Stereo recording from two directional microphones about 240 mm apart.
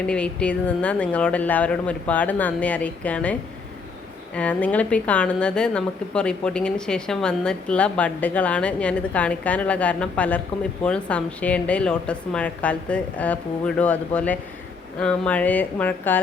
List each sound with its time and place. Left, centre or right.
0.0 s a woman's voice: centre
4.4 s a woman's voice: centre